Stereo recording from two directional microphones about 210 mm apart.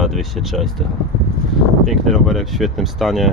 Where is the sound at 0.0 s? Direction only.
Centre (ahead or behind).